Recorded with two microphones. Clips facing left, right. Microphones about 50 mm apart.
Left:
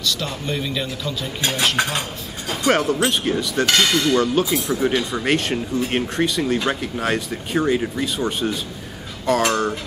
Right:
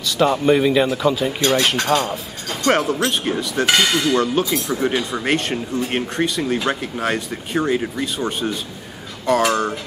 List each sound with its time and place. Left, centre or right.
0.2 s a man's voice: right
1.8 s dishes: centre
2.6 s speech: centre